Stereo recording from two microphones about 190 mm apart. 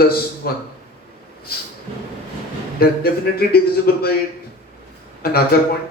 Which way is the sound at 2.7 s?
55° left (ahead or behind).